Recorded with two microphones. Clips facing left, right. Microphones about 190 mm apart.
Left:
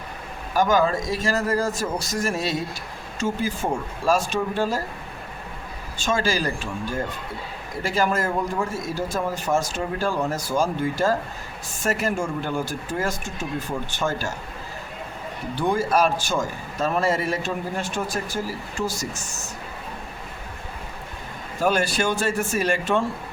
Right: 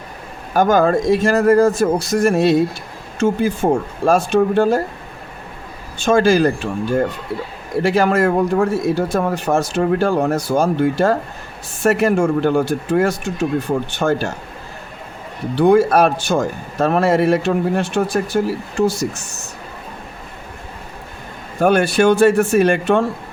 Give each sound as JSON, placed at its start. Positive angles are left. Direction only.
{"t": 0.5, "sound": "speech", "side_deg": -55}
{"t": 6.1, "sound": "speech", "side_deg": -55}
{"t": 15.5, "sound": "speech", "side_deg": -65}
{"t": 21.6, "sound": "speech", "side_deg": -60}